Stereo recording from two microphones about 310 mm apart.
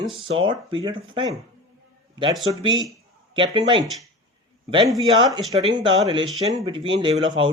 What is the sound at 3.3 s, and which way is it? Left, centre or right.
Speech, centre.